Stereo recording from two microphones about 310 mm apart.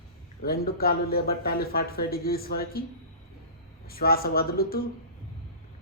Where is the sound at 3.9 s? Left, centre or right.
Left.